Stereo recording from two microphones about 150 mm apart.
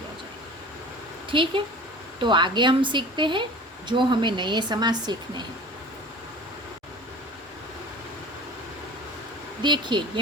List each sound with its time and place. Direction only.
1.3 s a woman's voice: 35° right (ahead or behind)
9.6 s speech: 30° right (ahead or behind)